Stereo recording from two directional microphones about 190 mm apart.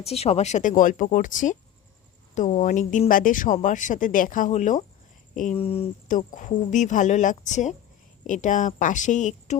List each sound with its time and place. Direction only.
0.0 s speech: 35° left (ahead or behind)